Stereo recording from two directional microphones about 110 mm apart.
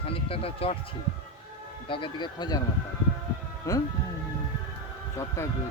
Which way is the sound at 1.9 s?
45° left (ahead or behind).